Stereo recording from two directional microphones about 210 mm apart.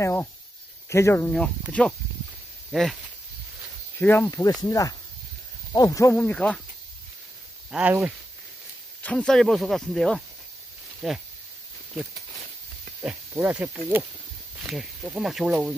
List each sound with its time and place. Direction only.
0.0 s speech: 10° left (ahead or behind)
4.0 s speech: 10° left (ahead or behind)
7.7 s speech: 10° right (ahead or behind)
9.0 s speech: 5° left (ahead or behind)
13.0 s speech: 10° right (ahead or behind)